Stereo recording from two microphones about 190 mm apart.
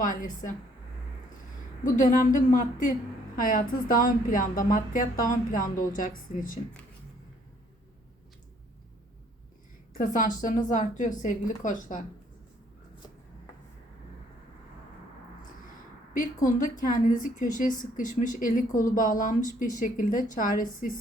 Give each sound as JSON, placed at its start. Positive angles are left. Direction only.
{"t": 0.0, "sound": "speech", "side_deg": 45}
{"t": 1.8, "sound": "speech", "side_deg": 45}
{"t": 10.0, "sound": "speech", "side_deg": 45}
{"t": 16.1, "sound": "speech", "side_deg": 40}